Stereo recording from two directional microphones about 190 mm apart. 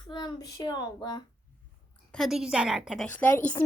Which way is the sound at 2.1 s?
Centre (ahead or behind).